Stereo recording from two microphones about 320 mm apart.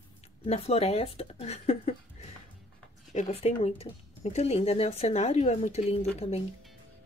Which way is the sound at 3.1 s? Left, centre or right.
Centre.